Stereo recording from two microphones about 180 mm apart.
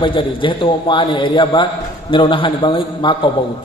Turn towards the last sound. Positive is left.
turn(degrees=25)  # may be behind; listen again after turning